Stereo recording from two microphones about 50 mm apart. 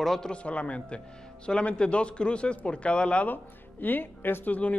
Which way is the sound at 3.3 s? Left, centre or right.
Left.